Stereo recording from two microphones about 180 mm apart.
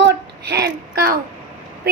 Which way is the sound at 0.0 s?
65° right (ahead or behind).